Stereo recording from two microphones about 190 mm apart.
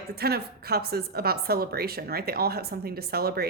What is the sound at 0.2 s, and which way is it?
A woman's voice, 55° right (ahead or behind).